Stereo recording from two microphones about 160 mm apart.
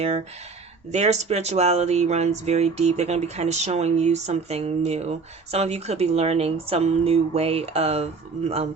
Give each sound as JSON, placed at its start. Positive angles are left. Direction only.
{"t": 0.9, "sound": "speech", "side_deg": -45}